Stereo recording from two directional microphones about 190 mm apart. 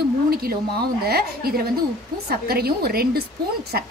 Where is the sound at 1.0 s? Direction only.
55° right (ahead or behind).